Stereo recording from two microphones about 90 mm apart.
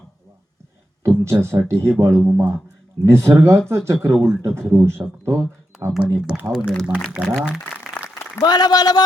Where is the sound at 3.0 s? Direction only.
30° right (ahead or behind).